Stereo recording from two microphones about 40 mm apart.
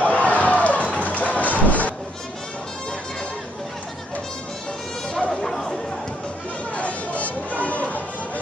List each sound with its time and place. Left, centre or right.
0.0 s a sound: left
0.9 s music: left
5.3 s chatter: centre
6.7 s chatter: left